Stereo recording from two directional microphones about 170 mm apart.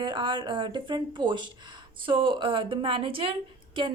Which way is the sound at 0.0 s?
30° right (ahead or behind).